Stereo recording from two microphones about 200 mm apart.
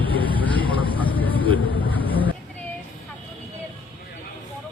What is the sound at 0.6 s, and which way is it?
Vehicle, 25° right (ahead or behind).